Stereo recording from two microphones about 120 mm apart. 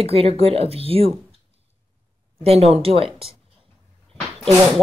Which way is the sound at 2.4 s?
55° right (ahead or behind).